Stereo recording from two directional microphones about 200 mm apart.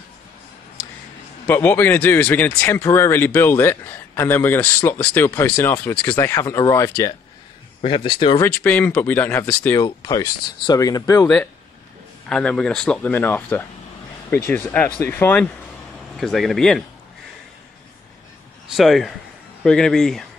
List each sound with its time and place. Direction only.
1.5 s speech: 10° left (ahead or behind)
8.5 s speech: 5° left (ahead or behind)
9.8 s speech: 20° left (ahead or behind)
12.3 s speech: 5° left (ahead or behind)
18.7 s speech: centre (ahead or behind)